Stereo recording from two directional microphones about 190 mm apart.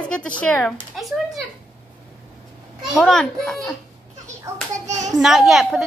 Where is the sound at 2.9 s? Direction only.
5° left (ahead or behind).